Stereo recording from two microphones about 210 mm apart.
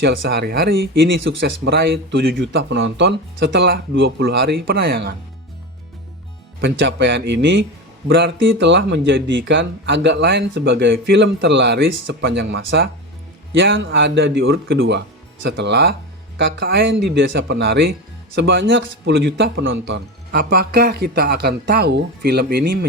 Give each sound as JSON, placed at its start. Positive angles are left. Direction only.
{"t": 0.0, "sound": "speech", "side_deg": -50}
{"t": 6.6, "sound": "speech", "side_deg": -60}
{"t": 20.3, "sound": "speech", "side_deg": -45}